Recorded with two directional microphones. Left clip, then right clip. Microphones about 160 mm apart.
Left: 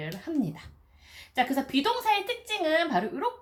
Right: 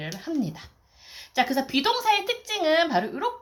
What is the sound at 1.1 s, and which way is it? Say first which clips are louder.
Speech: right 3 dB; 35° right (ahead or behind).